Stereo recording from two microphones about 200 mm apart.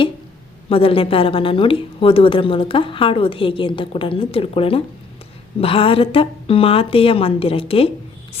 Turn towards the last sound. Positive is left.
turn(degrees=30)  # may be behind; listen again after turning